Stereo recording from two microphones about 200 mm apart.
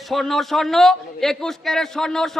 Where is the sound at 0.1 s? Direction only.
Centre (ahead or behind).